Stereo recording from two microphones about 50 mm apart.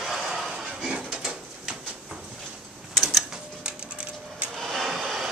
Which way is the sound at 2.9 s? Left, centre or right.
Centre.